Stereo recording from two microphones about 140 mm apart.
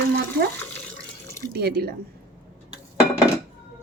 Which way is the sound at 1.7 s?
90° right.